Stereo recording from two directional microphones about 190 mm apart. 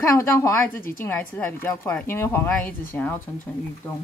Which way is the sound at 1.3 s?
10° left (ahead or behind).